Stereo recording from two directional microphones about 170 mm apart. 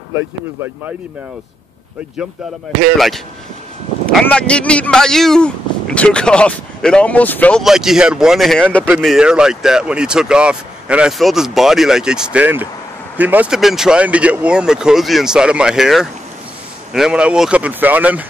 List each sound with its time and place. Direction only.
0.1 s speech: 15° right (ahead or behind)
4.0 s speech: 5° left (ahead or behind)
7.6 s speech: 5° right (ahead or behind)